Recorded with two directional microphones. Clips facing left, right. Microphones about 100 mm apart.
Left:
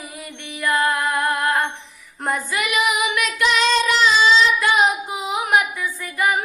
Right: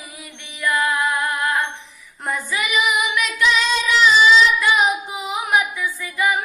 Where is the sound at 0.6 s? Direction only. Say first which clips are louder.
Even; 35° left (ahead or behind).